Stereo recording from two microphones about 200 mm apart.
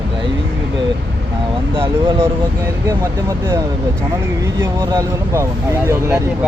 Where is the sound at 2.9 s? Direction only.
15° right (ahead or behind).